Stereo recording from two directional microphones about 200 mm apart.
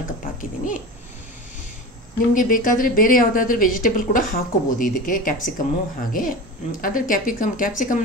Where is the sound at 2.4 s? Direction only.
40° left (ahead or behind).